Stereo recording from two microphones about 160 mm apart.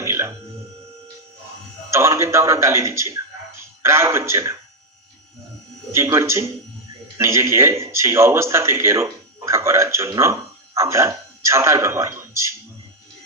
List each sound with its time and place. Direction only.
0.0 s a sound: 15° right (ahead or behind)
1.9 s a man's voice: 15° right (ahead or behind)
5.9 s a man's voice: 15° right (ahead or behind)